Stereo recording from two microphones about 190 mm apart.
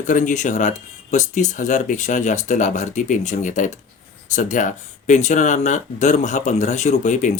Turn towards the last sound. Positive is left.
turn(degrees=40)  # may be behind; listen again after turning